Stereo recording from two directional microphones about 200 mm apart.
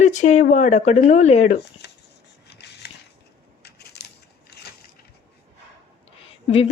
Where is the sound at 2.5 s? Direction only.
60° left (ahead or behind).